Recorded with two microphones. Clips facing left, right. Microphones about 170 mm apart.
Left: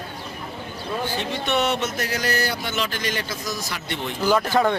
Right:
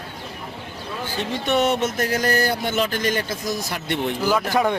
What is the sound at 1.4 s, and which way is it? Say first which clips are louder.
Speech: right 4 dB; 45° right (ahead or behind).